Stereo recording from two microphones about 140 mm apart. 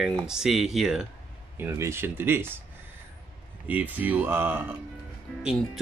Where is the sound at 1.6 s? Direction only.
15° right (ahead or behind).